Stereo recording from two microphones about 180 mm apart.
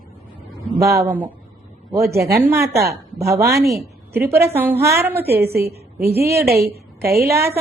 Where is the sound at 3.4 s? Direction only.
15° right (ahead or behind).